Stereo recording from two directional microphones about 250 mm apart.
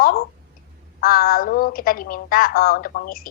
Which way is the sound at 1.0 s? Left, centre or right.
Left.